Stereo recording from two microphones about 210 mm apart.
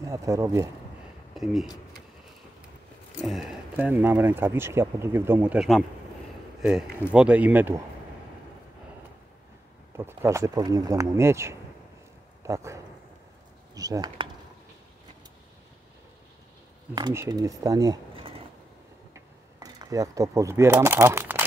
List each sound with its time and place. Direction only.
0.0 s speech: 15° right (ahead or behind)
1.3 s speech: centre (ahead or behind)
3.3 s speech: centre (ahead or behind)
7.1 s speech: 5° right (ahead or behind)
9.9 s speech: 10° right (ahead or behind)
16.9 s speech: 15° right (ahead or behind)